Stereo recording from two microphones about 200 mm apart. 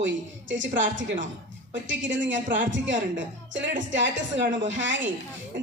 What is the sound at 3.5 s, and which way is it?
A woman's voice, 65° right (ahead or behind).